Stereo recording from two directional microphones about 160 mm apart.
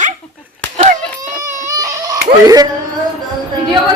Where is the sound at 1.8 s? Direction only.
20° right (ahead or behind).